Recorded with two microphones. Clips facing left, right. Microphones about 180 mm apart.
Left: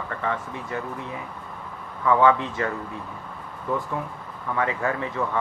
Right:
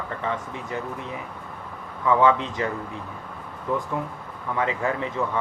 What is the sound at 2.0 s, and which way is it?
Speech, 20° right (ahead or behind).